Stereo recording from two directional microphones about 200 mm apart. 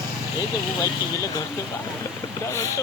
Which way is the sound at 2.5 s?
15° left (ahead or behind).